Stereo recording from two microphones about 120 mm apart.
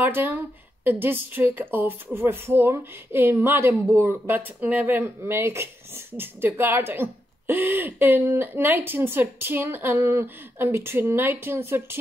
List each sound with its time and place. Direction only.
0.0 s a woman's voice: 15° right (ahead or behind)